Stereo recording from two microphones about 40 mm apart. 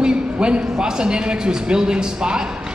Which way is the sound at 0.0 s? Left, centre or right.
Right.